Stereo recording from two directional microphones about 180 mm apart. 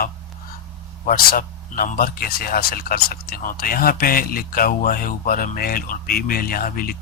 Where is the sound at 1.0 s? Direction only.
55° left (ahead or behind).